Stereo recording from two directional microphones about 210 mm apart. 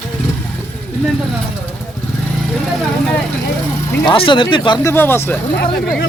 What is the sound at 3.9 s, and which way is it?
Speech, 15° left (ahead or behind).